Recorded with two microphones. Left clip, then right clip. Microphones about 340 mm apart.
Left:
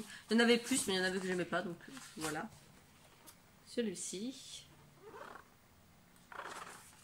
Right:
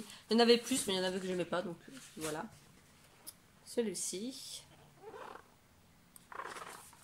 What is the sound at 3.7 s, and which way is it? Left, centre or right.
Speech, centre.